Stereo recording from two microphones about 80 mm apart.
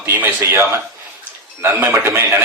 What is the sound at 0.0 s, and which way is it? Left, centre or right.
A man's voice, right.